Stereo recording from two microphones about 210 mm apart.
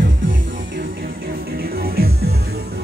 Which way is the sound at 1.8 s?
45° right (ahead or behind).